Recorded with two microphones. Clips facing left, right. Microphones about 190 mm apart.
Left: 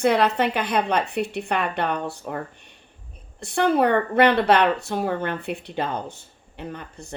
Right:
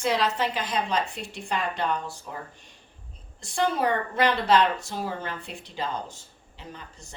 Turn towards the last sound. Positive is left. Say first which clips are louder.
# left 8 dB
turn(degrees=60)  # may be behind; listen again after turning